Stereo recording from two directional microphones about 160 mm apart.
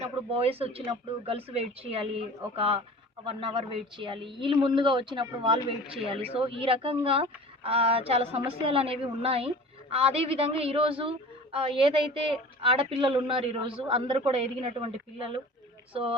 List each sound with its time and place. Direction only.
0.0 s a woman's voice: 35° right (ahead or behind)